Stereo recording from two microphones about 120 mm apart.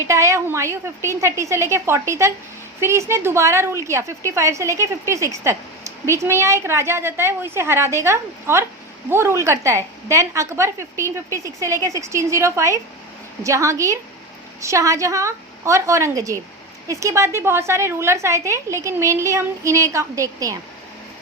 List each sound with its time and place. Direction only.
0.0 s a woman's voice: 25° right (ahead or behind)